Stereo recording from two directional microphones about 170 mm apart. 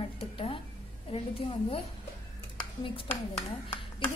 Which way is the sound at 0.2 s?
30° left (ahead or behind).